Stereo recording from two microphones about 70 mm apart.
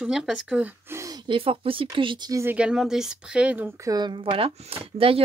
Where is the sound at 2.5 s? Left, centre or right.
Centre.